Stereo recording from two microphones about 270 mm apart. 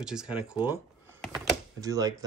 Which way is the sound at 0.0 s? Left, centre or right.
Centre.